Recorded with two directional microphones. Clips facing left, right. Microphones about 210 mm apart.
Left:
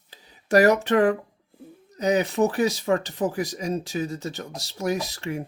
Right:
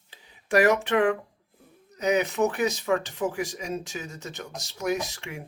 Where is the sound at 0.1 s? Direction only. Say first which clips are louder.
Left 4 dB; 40° left (ahead or behind).